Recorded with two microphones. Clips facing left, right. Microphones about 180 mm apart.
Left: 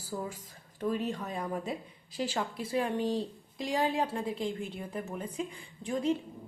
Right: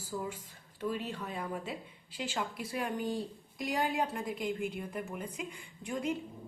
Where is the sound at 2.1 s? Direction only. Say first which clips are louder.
Left 4 dB; 35° left (ahead or behind).